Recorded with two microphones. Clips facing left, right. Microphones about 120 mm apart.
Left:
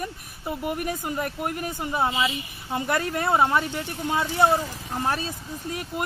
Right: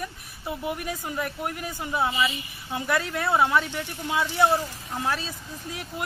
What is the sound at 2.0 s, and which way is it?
Speech, 20° left (ahead or behind).